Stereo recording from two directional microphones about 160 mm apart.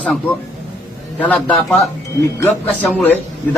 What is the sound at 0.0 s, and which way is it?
A man's voice, 10° left (ahead or behind).